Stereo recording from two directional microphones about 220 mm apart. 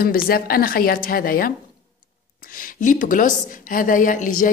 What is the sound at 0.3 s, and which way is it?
A woman's voice, 40° left (ahead or behind).